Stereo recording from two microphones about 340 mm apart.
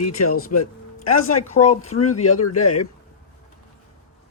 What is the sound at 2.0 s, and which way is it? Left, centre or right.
Speech, left.